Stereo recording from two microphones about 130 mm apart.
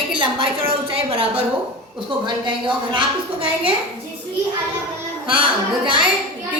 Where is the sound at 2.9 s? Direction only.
40° right (ahead or behind).